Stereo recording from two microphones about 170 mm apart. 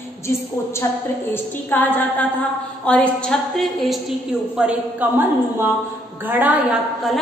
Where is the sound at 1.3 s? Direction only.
10° left (ahead or behind); by 5.2 s 10° right (ahead or behind).